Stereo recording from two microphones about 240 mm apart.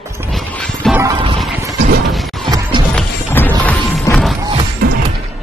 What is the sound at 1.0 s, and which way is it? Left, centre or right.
Music, centre.